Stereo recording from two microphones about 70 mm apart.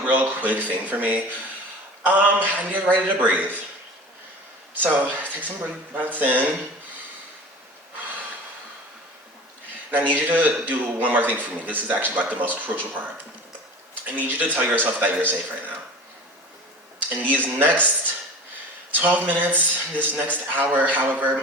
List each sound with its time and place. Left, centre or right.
0.0 s a man's voice: right
4.8 s a man's voice: right
10.1 s a man's voice: right
14.1 s a man's voice: right
17.3 s a man's voice: right
18.9 s a man's voice: right